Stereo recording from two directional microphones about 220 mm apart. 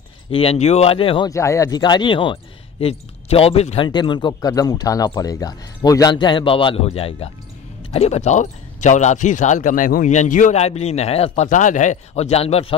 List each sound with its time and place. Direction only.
0.3 s speech: 25° left (ahead or behind)